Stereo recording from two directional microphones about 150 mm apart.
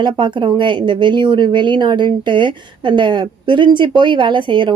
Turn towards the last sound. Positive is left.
turn(degrees=-30)  # may be behind; listen again after turning